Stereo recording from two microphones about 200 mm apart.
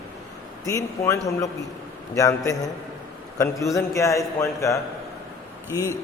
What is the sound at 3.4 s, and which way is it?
A man's voice, 15° left (ahead or behind).